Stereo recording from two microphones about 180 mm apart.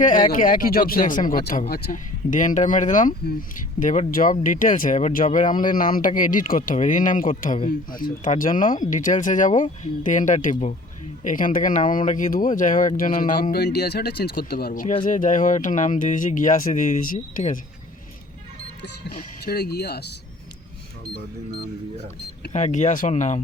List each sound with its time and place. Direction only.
0.3 s speech: 50° left (ahead or behind)
19.1 s speech: 60° left (ahead or behind)
22.5 s speech: 40° left (ahead or behind)